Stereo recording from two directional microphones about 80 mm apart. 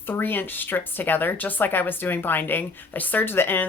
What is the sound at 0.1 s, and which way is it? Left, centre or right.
Speech, left.